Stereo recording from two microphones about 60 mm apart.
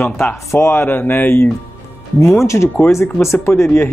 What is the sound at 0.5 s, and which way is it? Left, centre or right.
Speech, left.